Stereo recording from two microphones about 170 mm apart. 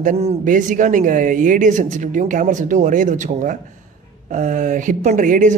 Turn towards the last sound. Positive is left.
turn(degrees=-50)  # may be behind; listen again after turning